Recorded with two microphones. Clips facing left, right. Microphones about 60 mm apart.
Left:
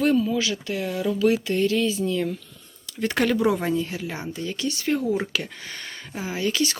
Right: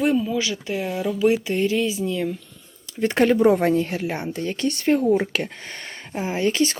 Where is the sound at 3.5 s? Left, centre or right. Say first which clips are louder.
Right 5 dB; right.